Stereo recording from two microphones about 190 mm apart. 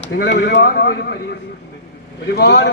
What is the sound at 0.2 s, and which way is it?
Speech, 65° left (ahead or behind).